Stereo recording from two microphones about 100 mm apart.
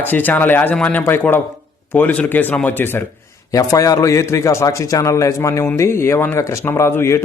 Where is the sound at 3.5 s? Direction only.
35° left (ahead or behind).